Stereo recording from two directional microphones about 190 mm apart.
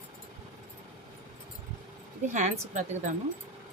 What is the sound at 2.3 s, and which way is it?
Speech, 40° right (ahead or behind).